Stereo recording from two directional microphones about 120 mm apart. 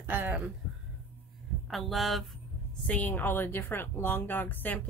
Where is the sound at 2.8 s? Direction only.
15° left (ahead or behind).